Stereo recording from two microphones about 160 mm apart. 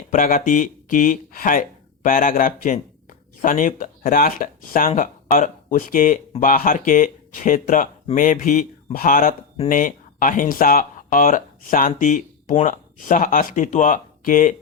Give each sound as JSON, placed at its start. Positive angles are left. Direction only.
{"t": 0.1, "sound": "speech", "side_deg": 55}